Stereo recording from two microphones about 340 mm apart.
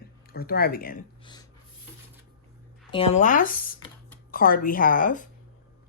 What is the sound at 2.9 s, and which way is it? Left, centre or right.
Speech, centre.